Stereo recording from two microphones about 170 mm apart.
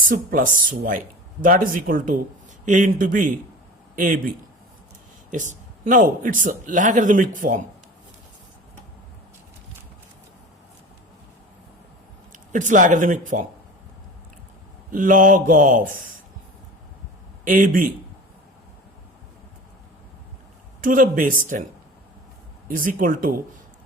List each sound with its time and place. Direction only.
0.1 s a man's voice: 55° right (ahead or behind)
5.3 s speech: 45° right (ahead or behind)
12.5 s speech: 50° right (ahead or behind)
14.8 s speech: 50° right (ahead or behind)
17.4 s speech: 50° right (ahead or behind)
20.8 s speech: 50° right (ahead or behind)
22.7 s speech: 50° right (ahead or behind)